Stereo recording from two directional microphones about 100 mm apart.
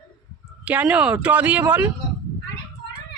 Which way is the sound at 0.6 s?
10° right (ahead or behind).